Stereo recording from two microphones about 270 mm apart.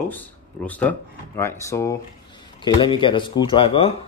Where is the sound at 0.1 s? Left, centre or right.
Centre.